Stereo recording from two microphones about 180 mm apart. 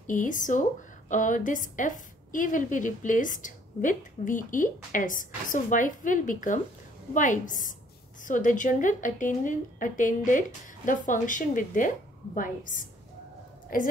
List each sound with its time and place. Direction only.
0.0 s a woman's voice: 45° left (ahead or behind)